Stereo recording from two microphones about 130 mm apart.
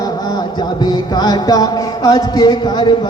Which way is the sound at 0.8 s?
30° left (ahead or behind).